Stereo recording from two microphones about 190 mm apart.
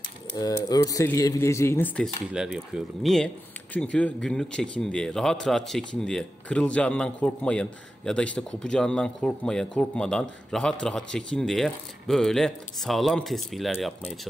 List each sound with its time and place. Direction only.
0.3 s speech: 15° left (ahead or behind)
2.3 s a man's voice: centre (ahead or behind)